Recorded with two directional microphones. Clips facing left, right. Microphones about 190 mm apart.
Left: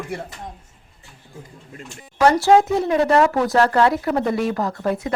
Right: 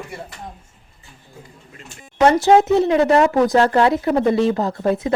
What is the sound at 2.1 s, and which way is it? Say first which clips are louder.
Speech: right 1 dB; 20° right (ahead or behind).